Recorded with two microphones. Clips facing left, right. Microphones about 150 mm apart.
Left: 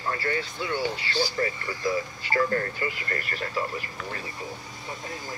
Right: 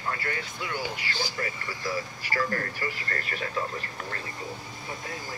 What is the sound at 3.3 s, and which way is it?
Speech, centre (ahead or behind).